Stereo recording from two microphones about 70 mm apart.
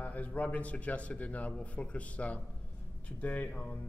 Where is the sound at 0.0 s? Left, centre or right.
Left.